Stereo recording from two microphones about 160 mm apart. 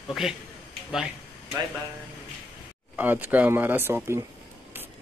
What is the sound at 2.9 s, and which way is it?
Speech, 10° right (ahead or behind).